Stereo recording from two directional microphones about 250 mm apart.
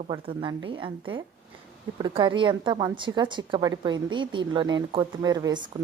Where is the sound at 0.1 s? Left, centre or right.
Centre.